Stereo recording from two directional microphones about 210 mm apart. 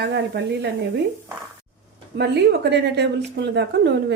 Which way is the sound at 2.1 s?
50° right (ahead or behind).